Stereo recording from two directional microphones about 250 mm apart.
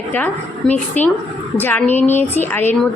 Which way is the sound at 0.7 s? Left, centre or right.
Centre.